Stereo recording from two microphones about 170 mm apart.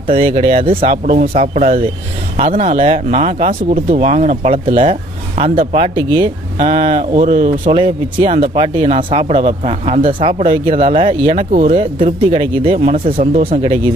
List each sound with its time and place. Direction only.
0.1 s speech: 35° right (ahead or behind)